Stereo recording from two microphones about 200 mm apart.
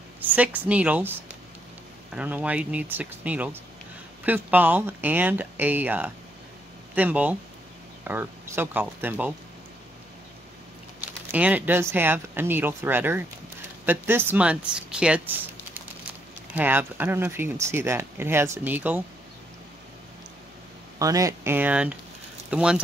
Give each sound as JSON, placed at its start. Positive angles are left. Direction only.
{"t": 0.2, "sound": "speech", "side_deg": -10}
{"t": 2.1, "sound": "speech", "side_deg": -5}
{"t": 11.0, "sound": "speech", "side_deg": -5}
{"t": 21.0, "sound": "speech", "side_deg": -15}